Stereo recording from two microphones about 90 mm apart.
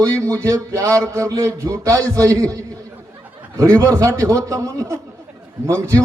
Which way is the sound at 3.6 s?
35° right (ahead or behind).